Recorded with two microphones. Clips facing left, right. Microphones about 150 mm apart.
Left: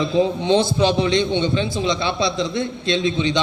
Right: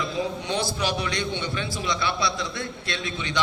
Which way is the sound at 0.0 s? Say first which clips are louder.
Left 9 dB; 25° left (ahead or behind).